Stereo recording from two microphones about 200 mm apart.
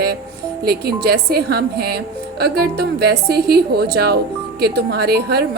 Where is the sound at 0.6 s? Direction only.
50° right (ahead or behind).